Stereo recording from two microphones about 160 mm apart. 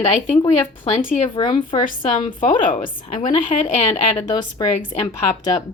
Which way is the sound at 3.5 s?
40° left (ahead or behind).